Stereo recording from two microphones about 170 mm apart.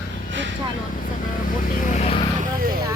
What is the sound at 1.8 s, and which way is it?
Speech, 45° left (ahead or behind).